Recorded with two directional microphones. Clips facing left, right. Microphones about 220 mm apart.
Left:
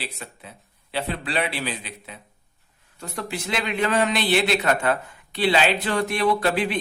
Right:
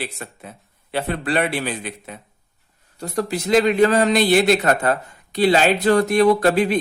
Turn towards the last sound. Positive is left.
turn(degrees=-40)  # may be behind; listen again after turning